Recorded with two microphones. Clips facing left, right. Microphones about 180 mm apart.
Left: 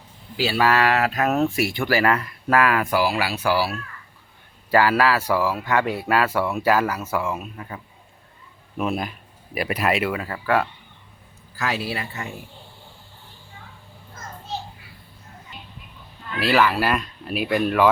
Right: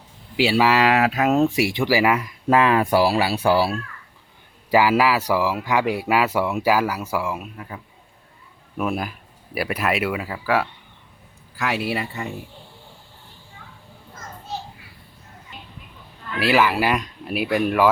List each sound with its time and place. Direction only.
0.4 s speech: 15° right (ahead or behind); by 3.8 s 30° right (ahead or behind)
4.7 s speech: 10° right (ahead or behind)
8.9 s speech: 5° right (ahead or behind)
16.4 s speech: 10° right (ahead or behind)